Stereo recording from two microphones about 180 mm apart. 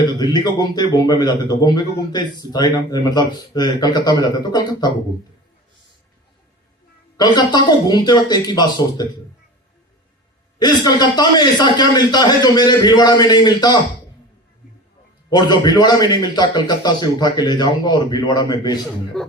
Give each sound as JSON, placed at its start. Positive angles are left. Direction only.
{"t": 0.0, "sound": "a man's voice", "side_deg": 25}
{"t": 7.2, "sound": "a man's voice", "side_deg": 25}
{"t": 10.6, "sound": "a man's voice", "side_deg": 25}
{"t": 15.3, "sound": "a man's voice", "side_deg": 25}
{"t": 19.1, "sound": "music", "side_deg": 5}